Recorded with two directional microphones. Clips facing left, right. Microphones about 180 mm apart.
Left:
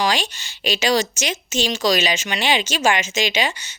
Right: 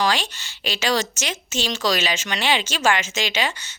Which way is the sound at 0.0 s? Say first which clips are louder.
Left 1 dB; 15° left (ahead or behind).